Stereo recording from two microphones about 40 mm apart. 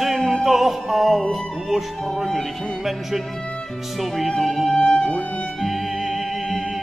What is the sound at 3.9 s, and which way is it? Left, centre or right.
Music, centre.